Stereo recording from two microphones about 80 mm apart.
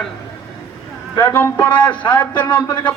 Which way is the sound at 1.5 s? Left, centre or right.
Centre.